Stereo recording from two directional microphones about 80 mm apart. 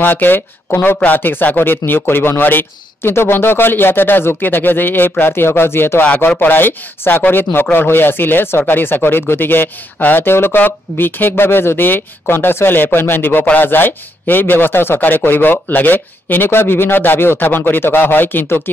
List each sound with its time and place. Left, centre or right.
0.0 s speech: left